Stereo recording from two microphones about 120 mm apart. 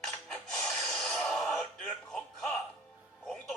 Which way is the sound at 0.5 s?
5° left (ahead or behind).